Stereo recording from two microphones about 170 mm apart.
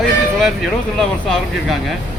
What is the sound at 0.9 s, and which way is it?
Speech, centre (ahead or behind).